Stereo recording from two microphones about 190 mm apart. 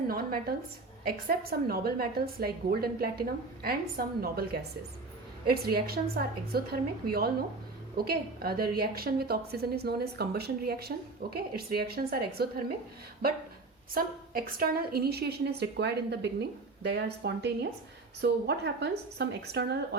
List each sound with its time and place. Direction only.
0.1 s a woman's voice: 50° right (ahead or behind)
13.9 s a woman's voice: 50° right (ahead or behind)